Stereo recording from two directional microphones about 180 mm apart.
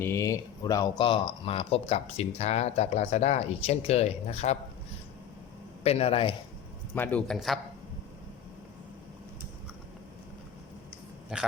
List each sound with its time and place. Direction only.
0.0 s speech: 15° left (ahead or behind); by 4.5 s 35° left (ahead or behind)
5.8 s speech: 35° left (ahead or behind)
6.9 s speech: 10° left (ahead or behind)
11.3 s speech: 5° right (ahead or behind)